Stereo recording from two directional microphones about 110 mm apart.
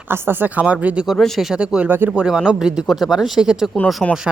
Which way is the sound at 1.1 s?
Centre (ahead or behind).